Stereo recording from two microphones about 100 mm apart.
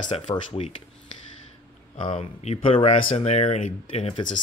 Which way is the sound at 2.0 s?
70° left (ahead or behind).